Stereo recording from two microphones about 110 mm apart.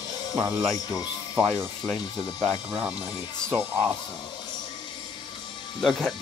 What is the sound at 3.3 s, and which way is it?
Speech, 5° left (ahead or behind).